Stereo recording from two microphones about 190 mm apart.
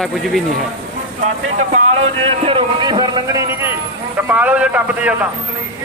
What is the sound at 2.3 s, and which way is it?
A man's voice, 30° right (ahead or behind).